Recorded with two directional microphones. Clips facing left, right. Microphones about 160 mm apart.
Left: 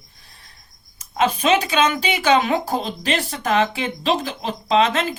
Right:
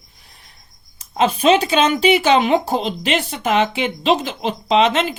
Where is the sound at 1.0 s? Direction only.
30° right (ahead or behind).